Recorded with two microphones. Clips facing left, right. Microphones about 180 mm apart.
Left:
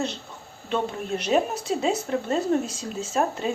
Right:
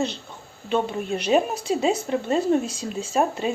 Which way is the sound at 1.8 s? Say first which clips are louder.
Right 2 dB; 5° right (ahead or behind).